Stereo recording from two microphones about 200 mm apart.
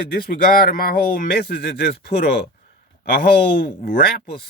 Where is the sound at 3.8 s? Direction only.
50° left (ahead or behind).